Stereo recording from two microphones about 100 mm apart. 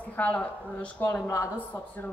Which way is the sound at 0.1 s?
15° left (ahead or behind).